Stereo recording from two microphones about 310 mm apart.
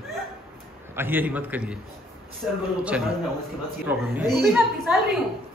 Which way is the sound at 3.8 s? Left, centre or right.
Centre.